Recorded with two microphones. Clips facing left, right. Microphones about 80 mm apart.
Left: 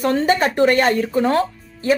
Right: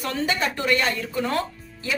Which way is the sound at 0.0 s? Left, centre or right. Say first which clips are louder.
Left 8 dB; left.